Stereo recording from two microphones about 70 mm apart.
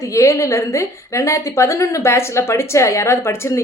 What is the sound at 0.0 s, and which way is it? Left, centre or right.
A woman's voice, left.